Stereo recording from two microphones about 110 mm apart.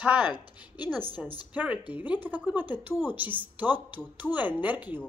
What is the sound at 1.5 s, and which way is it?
Speech, 10° right (ahead or behind).